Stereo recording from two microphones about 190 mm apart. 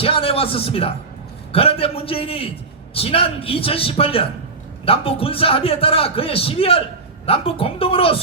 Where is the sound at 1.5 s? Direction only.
30° left (ahead or behind).